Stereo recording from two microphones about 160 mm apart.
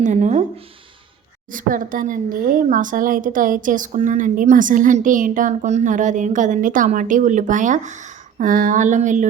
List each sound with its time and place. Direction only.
0.0 s speech: 50° right (ahead or behind)